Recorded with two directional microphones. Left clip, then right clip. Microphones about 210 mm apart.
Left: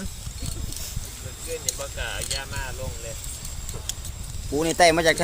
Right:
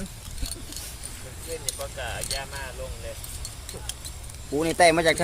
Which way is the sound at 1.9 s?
50° left (ahead or behind).